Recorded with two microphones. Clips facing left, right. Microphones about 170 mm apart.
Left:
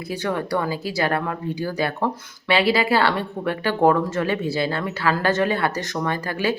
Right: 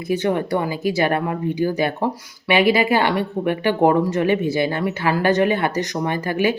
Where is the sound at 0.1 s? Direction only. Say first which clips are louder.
Right 5 dB; 20° right (ahead or behind).